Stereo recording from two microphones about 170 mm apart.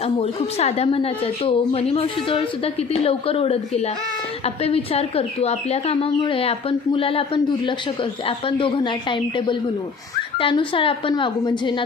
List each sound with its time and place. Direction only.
0.0 s a woman's voice: 35° left (ahead or behind)